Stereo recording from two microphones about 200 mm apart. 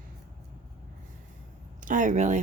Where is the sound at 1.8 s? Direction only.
40° right (ahead or behind).